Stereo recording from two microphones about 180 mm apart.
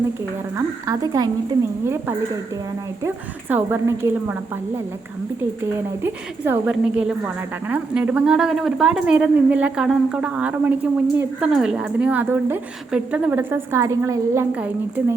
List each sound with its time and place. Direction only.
0.5 s a woman's voice: 20° right (ahead or behind)
3.5 s a woman's voice: 15° right (ahead or behind)
6.0 s a woman's voice: 10° right (ahead or behind)